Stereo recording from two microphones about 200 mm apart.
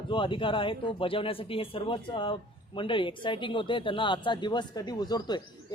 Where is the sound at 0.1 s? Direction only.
25° left (ahead or behind).